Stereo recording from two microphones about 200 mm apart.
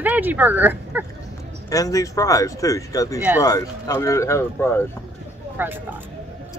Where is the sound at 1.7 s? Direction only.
15° left (ahead or behind).